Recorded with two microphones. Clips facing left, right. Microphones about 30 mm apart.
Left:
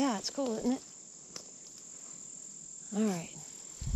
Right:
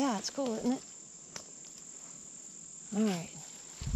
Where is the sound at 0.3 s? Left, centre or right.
Centre.